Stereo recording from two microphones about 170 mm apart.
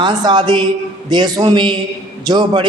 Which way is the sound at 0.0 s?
25° right (ahead or behind).